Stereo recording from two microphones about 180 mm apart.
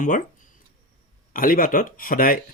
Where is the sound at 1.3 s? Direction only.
50° left (ahead or behind).